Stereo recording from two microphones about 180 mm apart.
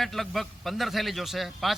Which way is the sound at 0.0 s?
Centre (ahead or behind).